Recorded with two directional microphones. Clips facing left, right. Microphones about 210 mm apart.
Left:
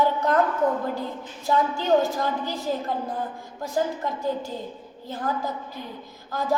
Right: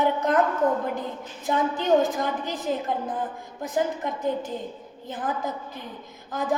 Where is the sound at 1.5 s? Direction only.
20° right (ahead or behind).